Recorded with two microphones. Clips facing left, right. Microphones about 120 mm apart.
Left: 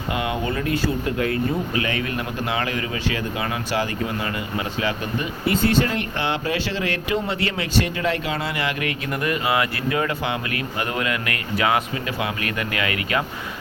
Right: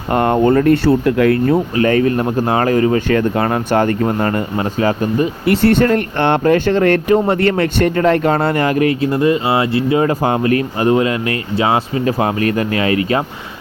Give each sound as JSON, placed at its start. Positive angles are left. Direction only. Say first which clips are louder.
{"t": 0.1, "sound": "speech", "louder": "right 13 dB", "side_deg": -50}
{"t": 1.7, "sound": "speech", "louder": "right 11 dB", "side_deg": -40}
{"t": 5.5, "sound": "speech", "louder": "right 7 dB", "side_deg": -65}